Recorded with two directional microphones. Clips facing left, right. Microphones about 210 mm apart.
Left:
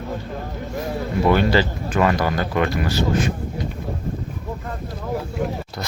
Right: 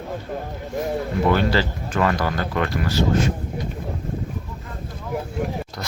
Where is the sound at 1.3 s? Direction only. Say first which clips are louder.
Left 3 dB; 15° left (ahead or behind).